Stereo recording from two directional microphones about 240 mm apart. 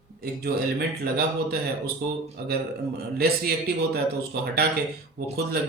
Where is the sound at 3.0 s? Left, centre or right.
Right.